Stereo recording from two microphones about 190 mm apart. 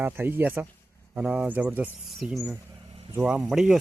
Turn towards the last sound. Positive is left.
turn(degrees=0)  # may be behind; listen again after turning